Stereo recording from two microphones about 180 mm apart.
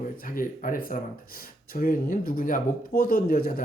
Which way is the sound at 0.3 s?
50° left (ahead or behind).